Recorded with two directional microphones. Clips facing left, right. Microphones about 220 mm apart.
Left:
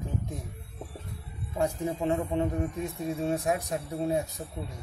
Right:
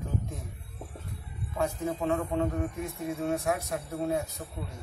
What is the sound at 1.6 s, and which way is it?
A man's voice, 15° left (ahead or behind).